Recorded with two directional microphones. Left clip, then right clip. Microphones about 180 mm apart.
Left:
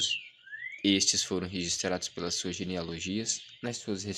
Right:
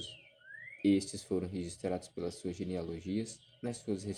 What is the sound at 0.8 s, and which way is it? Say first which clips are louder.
Speech: left 6 dB; 25° left (ahead or behind).